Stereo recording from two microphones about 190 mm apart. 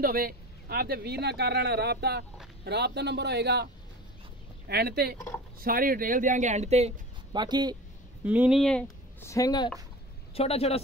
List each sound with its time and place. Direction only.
0.0 s speech: 50° right (ahead or behind)
4.6 s speech: 55° right (ahead or behind); by 6.9 s 35° right (ahead or behind)
7.3 s speech: 20° right (ahead or behind)
8.2 s speech: 5° right (ahead or behind); by 9.7 s 20° left (ahead or behind)
10.3 s a man's voice: 30° left (ahead or behind)